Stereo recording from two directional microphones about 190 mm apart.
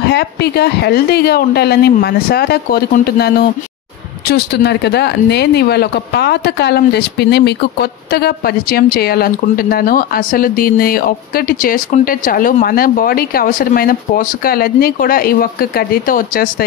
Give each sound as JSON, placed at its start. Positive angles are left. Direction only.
{"t": 0.1, "sound": "a woman's voice", "side_deg": 60}